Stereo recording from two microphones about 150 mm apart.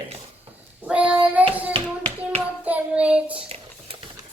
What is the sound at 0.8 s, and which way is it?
Speech, 10° right (ahead or behind).